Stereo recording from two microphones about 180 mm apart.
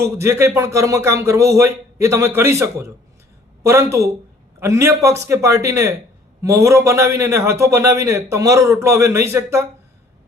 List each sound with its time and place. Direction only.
0.0 s a man's voice: 15° right (ahead or behind)